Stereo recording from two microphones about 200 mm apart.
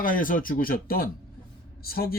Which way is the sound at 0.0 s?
45° left (ahead or behind).